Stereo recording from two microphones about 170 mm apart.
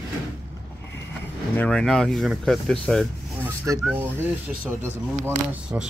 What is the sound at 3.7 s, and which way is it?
Speech, 15° right (ahead or behind).